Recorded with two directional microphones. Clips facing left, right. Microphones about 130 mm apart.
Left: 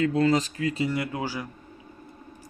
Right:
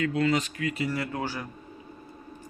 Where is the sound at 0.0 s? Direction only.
35° left (ahead or behind); by 1.5 s 10° left (ahead or behind).